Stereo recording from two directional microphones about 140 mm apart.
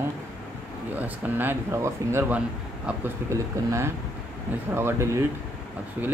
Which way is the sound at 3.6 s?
20° right (ahead or behind).